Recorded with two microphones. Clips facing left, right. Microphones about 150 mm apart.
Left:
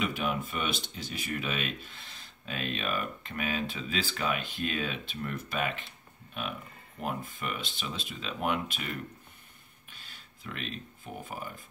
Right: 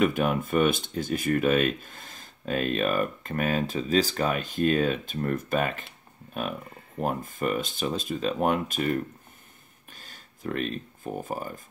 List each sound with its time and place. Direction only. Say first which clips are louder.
0.0 s speech: right 8 dB; 50° right (ahead or behind)
9.8 s a sound: right 4 dB; 45° right (ahead or behind)
11.2 s speech: right 7 dB; 45° right (ahead or behind)